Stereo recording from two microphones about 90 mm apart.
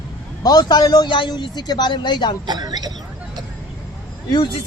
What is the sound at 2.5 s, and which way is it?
Speech, 50° right (ahead or behind).